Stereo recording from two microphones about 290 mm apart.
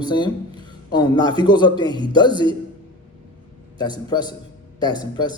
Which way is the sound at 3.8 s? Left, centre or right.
Centre.